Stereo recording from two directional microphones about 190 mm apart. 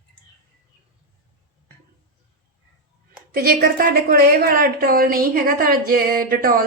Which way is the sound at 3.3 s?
50° right (ahead or behind).